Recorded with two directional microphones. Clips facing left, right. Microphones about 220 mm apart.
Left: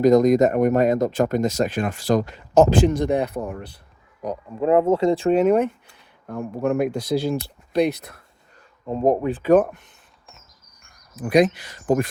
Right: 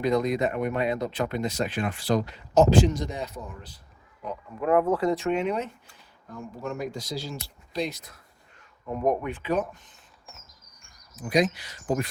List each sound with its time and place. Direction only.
0.0 s speech: 45° left (ahead or behind); by 3.8 s 60° left (ahead or behind)
4.2 s speech: 40° left (ahead or behind)
4.6 s speech: 25° left (ahead or behind); by 8.2 s 60° left (ahead or behind)
8.9 s speech: 30° left (ahead or behind)
9.5 s speech: 50° left (ahead or behind)
11.1 s speech: 60° left (ahead or behind)